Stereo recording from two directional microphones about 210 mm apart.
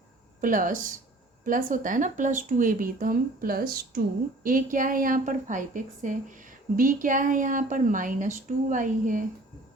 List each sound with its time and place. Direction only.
0.4 s a woman's voice: 40° right (ahead or behind)